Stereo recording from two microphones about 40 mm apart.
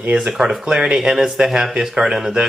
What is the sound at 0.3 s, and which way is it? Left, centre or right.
Speech, centre.